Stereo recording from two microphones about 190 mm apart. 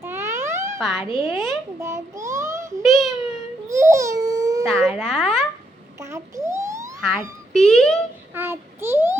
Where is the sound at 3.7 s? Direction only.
15° right (ahead or behind).